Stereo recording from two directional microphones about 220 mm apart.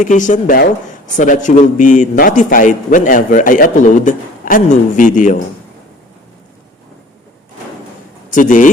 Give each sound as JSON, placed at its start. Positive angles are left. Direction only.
{"t": 0.0, "sound": "a man's voice", "side_deg": 35}
{"t": 8.3, "sound": "a man's voice", "side_deg": 35}